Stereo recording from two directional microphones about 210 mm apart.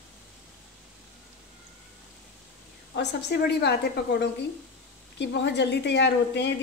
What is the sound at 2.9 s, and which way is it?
Speech, 50° left (ahead or behind).